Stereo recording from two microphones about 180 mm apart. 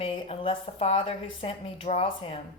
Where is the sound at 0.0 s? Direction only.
30° left (ahead or behind).